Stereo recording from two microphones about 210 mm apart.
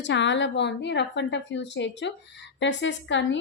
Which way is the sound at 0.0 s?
60° left (ahead or behind).